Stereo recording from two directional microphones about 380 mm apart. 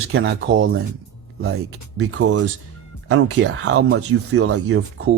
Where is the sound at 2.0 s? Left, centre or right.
Right.